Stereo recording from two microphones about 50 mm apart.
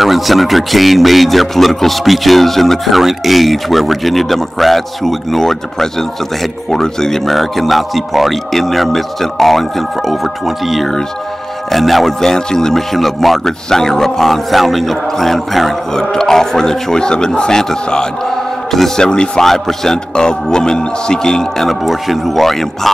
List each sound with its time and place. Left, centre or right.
0.0 s a man's voice: centre
19.0 s speech: centre